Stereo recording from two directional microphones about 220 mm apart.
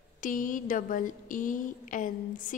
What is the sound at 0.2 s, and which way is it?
A woman's voice, 35° left (ahead or behind).